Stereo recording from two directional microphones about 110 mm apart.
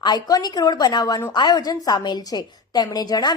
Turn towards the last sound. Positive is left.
turn(degrees=35)  # may be behind; listen again after turning